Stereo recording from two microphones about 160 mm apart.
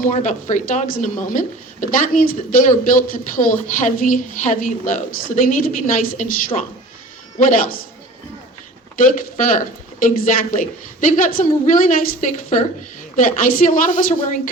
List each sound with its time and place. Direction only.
0.0 s speech: 50° left (ahead or behind)
7.3 s a woman's voice: 55° left (ahead or behind)
9.0 s a woman's voice: 55° left (ahead or behind)